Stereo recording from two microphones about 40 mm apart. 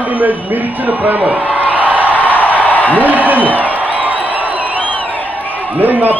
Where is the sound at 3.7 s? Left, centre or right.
Right.